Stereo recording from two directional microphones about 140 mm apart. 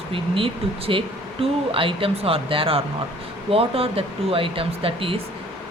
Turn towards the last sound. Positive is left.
turn(degrees=-40)  # may be behind; listen again after turning